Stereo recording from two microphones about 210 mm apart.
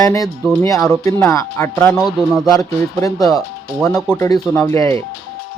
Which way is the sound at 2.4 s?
15° left (ahead or behind).